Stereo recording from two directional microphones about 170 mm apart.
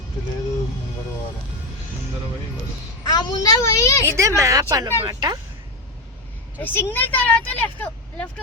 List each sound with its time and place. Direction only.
3.0 s a child's voice: 25° left (ahead or behind)
4.0 s a woman's voice: 15° right (ahead or behind)
6.6 s speech: 10° left (ahead or behind)